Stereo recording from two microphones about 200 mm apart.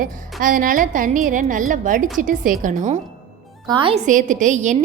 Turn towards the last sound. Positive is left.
turn(degrees=-40)  # may be behind; listen again after turning